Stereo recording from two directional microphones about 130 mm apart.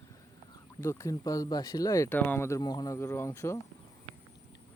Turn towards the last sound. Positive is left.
turn(degrees=20)  # may be behind; listen again after turning